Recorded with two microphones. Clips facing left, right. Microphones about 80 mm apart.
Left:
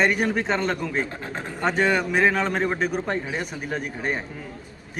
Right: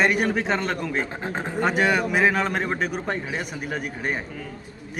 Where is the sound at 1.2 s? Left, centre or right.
Right.